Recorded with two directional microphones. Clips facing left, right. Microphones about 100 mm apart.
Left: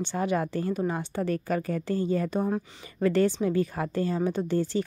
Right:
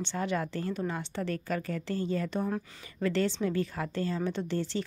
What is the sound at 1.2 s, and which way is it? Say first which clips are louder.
A woman's voice: left 5 dB; 30° left (ahead or behind).